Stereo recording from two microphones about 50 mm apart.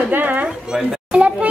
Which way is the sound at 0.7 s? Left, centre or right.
Right.